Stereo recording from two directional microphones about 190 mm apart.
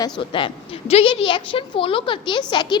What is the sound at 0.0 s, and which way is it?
A woman's voice, 25° left (ahead or behind).